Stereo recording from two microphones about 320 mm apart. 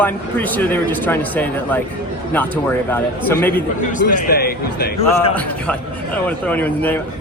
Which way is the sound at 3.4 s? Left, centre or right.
Centre.